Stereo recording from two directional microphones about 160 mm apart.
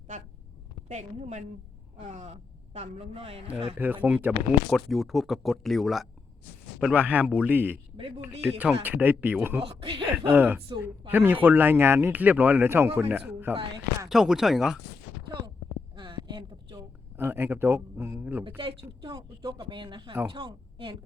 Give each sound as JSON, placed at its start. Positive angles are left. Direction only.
{"t": 0.9, "sound": "a woman's voice", "side_deg": -50}
{"t": 3.8, "sound": "speech", "side_deg": -10}
{"t": 9.6, "sound": "a man's voice", "side_deg": -35}
{"t": 10.3, "sound": "speech", "side_deg": -10}
{"t": 14.1, "sound": "speech", "side_deg": 0}
{"t": 16.0, "sound": "a sound", "side_deg": -30}
{"t": 17.2, "sound": "speech", "side_deg": -15}
{"t": 18.4, "sound": "a man's voice", "side_deg": -30}